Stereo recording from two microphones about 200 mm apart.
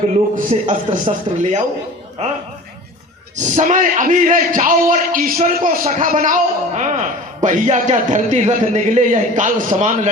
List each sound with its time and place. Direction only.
0.3 s speech: 40° right (ahead or behind)